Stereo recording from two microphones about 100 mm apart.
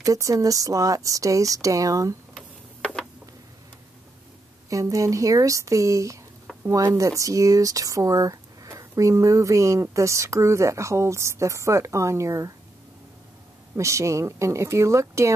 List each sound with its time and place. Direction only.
0.0 s speech: 35° right (ahead or behind)
2.3 s tick-tock: 10° left (ahead or behind)
4.6 s speech: 35° right (ahead or behind)
13.7 s speech: 30° right (ahead or behind)